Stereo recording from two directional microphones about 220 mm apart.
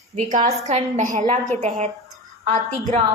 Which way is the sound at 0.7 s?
35° right (ahead or behind).